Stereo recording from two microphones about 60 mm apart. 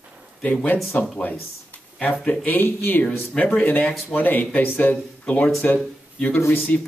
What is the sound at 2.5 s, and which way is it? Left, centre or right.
Speech, left.